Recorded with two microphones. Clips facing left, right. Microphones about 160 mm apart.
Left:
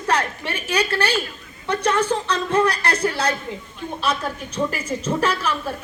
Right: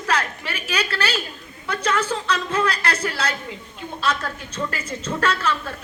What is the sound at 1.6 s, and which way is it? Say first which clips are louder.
Speech: left 3 dB; 30° left (ahead or behind).